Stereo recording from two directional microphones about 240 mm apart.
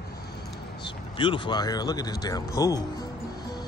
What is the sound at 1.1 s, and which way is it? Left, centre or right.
Speech, centre.